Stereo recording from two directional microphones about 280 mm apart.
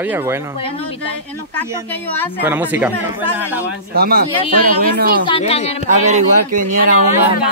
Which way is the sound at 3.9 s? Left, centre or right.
Right.